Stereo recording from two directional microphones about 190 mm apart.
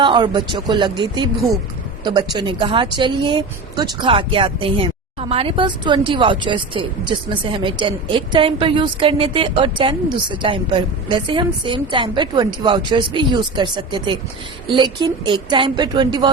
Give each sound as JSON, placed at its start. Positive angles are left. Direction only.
{"t": 0.0, "sound": "speech", "side_deg": -25}